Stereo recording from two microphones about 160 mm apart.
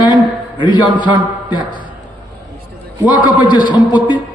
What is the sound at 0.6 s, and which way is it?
Speech, 30° left (ahead or behind).